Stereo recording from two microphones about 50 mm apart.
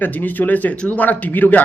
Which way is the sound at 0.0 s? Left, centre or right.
Left.